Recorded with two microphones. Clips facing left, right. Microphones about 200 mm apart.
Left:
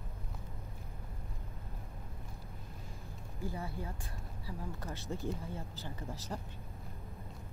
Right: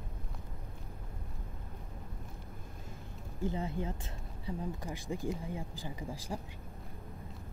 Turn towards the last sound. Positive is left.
turn(degrees=-10)  # may be behind; listen again after turning